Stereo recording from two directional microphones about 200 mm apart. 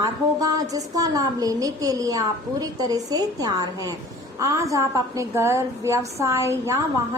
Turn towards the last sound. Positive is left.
turn(degrees=-15)  # may be behind; listen again after turning